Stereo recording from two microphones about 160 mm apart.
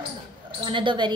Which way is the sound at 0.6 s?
30° right (ahead or behind).